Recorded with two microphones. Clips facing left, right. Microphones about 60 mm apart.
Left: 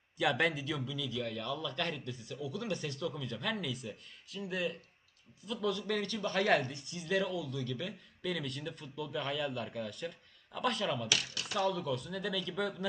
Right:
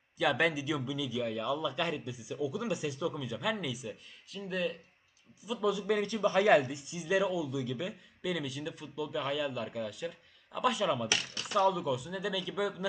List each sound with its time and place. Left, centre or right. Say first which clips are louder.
0.2 s a man's voice: right 2 dB; centre
5.5 s a man's voice: right 4 dB; centre
11.1 s speech: right 3 dB; right
11.6 s a man's voice: right 4 dB; centre